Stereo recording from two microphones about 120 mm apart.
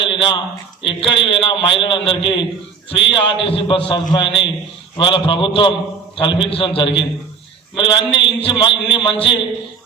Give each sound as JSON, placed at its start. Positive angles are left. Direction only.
{"t": 0.0, "sound": "a sound", "side_deg": 45}
{"t": 0.9, "sound": "a man's voice", "side_deg": 45}
{"t": 8.1, "sound": "a man's voice", "side_deg": 45}